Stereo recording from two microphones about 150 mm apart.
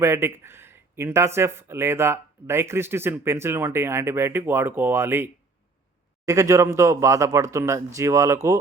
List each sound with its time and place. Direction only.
0.0 s speech: 15° right (ahead or behind)